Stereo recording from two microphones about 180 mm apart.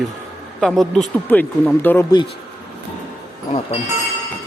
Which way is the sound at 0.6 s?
Centre (ahead or behind).